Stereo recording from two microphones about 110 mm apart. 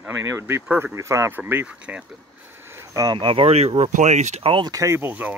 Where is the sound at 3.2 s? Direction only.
55° right (ahead or behind); by 4.5 s 85° right.